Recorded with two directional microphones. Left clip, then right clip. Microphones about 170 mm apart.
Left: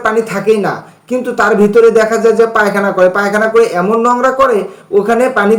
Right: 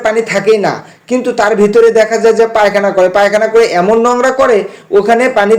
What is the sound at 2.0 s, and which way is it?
Speech, 5° right (ahead or behind).